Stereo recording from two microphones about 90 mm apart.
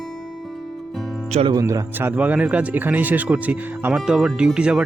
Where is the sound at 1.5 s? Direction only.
40° right (ahead or behind).